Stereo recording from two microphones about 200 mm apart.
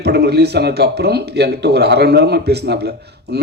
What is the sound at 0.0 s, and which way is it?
Speech, 55° right (ahead or behind).